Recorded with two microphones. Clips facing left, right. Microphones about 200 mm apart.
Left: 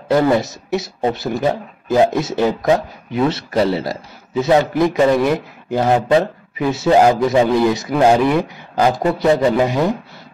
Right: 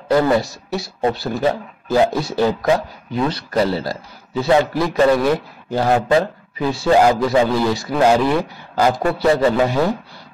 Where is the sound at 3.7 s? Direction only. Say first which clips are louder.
Left 2 dB; 25° left (ahead or behind).